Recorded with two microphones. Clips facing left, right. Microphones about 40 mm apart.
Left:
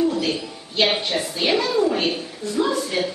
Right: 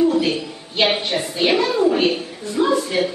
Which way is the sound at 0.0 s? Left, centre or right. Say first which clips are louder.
Right 4 dB; right.